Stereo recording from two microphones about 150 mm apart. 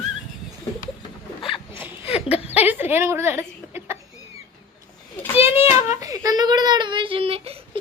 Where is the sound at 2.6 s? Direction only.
15° right (ahead or behind).